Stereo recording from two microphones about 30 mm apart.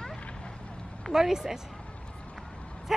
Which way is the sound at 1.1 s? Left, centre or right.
Centre.